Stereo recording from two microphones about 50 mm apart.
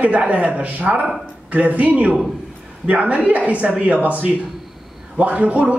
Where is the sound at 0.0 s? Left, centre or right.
Right.